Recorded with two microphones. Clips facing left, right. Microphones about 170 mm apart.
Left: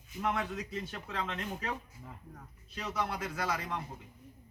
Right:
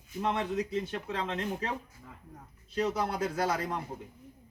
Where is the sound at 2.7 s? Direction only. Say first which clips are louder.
Right 6 dB; 35° right (ahead or behind).